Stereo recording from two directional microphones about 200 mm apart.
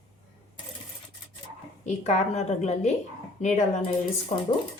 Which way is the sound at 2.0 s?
35° left (ahead or behind).